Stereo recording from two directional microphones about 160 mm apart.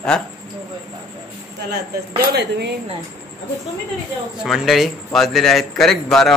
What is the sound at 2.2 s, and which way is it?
Speech, 85° right.